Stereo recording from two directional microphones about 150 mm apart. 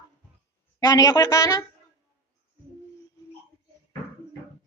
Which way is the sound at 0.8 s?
25° left (ahead or behind).